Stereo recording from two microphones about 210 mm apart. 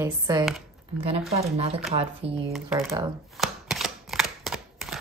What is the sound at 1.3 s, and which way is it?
Speech, 30° right (ahead or behind).